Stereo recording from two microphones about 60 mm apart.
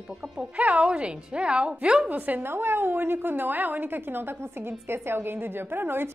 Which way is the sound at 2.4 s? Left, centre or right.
Right.